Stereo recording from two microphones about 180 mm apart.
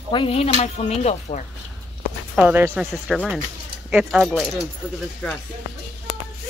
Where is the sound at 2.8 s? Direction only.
Centre (ahead or behind).